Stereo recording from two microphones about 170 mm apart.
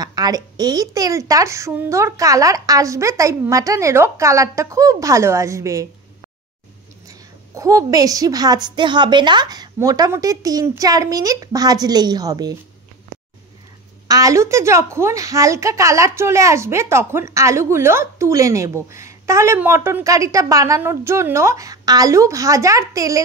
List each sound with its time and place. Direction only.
0.0 s a woman's voice: 25° right (ahead or behind)
7.1 s a woman's voice: 20° right (ahead or behind)
14.0 s a woman's voice: 20° right (ahead or behind)